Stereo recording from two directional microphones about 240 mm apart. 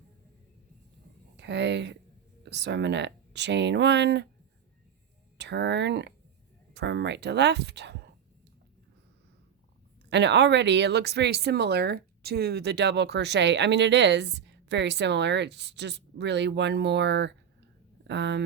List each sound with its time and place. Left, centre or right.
1.4 s speech: right
5.4 s speech: right
10.1 s speech: right